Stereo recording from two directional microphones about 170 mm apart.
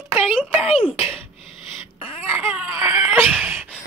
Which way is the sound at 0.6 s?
30° left (ahead or behind).